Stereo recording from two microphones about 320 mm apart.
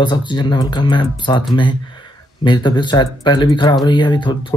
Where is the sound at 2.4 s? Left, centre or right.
Centre.